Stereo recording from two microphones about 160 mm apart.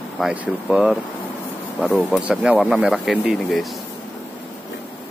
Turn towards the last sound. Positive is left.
turn(degrees=0)  # may be behind; listen again after turning